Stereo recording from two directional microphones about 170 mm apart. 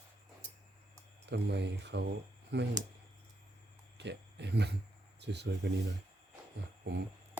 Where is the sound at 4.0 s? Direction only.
90° right.